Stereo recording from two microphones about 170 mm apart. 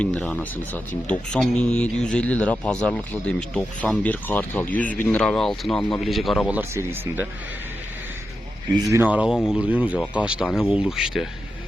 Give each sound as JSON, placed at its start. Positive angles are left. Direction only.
{"t": 0.0, "sound": "speech", "side_deg": 5}
{"t": 6.6, "sound": "speech", "side_deg": -10}
{"t": 8.9, "sound": "speech", "side_deg": -10}